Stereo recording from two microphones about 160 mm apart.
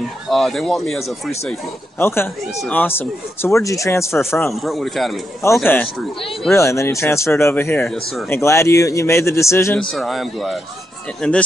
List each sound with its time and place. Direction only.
0.3 s a man's voice: centre (ahead or behind)
2.0 s speech: 15° left (ahead or behind)
4.6 s a man's voice: centre (ahead or behind)
5.7 s speech: 10° left (ahead or behind)
8.3 s speech: 15° left (ahead or behind)
9.8 s a man's voice: 5° left (ahead or behind)